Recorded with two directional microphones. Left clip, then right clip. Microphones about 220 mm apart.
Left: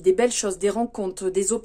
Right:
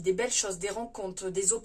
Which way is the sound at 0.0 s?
50° left (ahead or behind).